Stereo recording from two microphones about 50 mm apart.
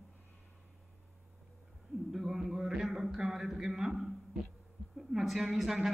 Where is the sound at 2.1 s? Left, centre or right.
Centre.